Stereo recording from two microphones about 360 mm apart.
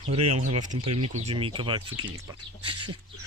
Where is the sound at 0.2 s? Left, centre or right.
Right.